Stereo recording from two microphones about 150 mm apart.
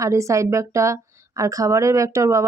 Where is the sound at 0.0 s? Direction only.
20° right (ahead or behind).